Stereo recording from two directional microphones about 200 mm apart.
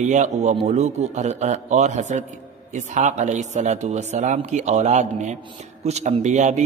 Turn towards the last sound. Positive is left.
turn(degrees=-35)  # may be behind; listen again after turning